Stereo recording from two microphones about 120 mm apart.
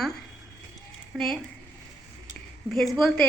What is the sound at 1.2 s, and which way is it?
Speech, centre (ahead or behind).